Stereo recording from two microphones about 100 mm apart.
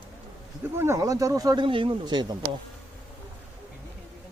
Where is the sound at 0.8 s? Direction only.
30° right (ahead or behind).